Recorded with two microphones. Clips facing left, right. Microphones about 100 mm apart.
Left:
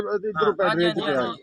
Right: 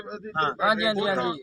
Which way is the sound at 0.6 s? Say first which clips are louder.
Left 2 dB; 20° right (ahead or behind).